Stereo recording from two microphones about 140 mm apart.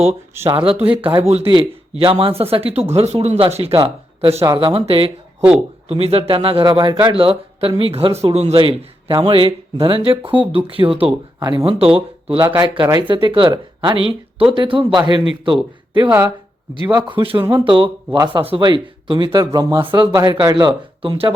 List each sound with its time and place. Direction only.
0.5 s a man's voice: 45° right (ahead or behind)
4.3 s speech: 20° right (ahead or behind)
4.5 s a man's voice: 40° right (ahead or behind)
16.0 s speech: 15° right (ahead or behind)
16.9 s a man's voice: 30° right (ahead or behind)